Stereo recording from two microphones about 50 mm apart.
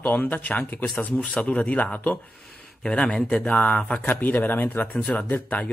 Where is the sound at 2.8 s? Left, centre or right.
Centre.